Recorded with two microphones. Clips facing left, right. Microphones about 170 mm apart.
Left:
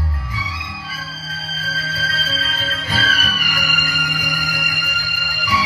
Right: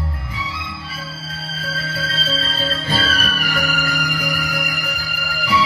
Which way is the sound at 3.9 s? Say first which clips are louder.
Right 3 dB; 60° right (ahead or behind).